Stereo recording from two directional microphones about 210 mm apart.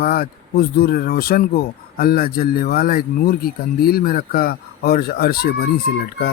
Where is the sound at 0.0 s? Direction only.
45° left (ahead or behind).